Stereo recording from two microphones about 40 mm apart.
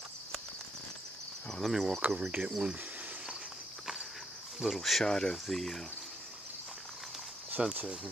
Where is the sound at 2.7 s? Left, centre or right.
Right.